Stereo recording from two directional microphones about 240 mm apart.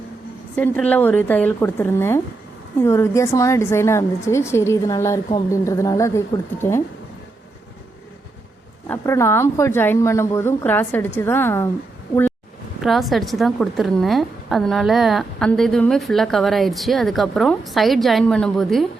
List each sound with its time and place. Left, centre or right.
0.5 s speech: centre
8.9 s speech: centre
12.8 s a woman's voice: centre